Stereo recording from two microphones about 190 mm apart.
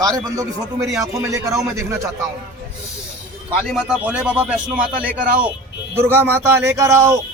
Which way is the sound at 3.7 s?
5° right (ahead or behind).